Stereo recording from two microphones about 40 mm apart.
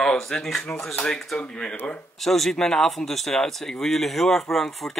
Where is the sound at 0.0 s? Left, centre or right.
Centre.